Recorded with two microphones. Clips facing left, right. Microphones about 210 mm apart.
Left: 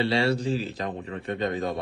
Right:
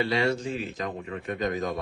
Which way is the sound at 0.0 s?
30° left (ahead or behind).